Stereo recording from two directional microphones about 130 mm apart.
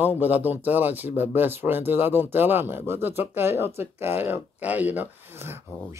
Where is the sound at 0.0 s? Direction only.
15° right (ahead or behind).